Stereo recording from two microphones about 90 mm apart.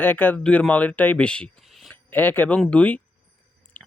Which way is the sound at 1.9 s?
20° left (ahead or behind).